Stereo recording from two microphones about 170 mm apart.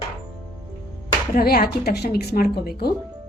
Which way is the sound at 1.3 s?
65° left (ahead or behind).